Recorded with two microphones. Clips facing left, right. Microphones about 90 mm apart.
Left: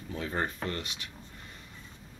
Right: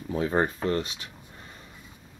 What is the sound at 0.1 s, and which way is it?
Speech, 30° right (ahead or behind).